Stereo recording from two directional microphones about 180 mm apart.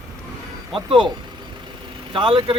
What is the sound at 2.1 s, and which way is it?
Speech, 30° right (ahead or behind).